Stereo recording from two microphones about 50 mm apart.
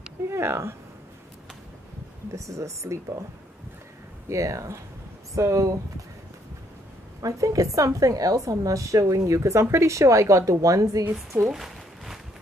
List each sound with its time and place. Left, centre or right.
0.3 s speech: right
2.3 s speech: right
4.3 s speech: right
7.3 s speech: right
11.5 s a sound: centre